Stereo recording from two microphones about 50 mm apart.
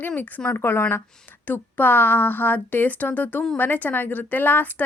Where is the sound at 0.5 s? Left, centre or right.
Left.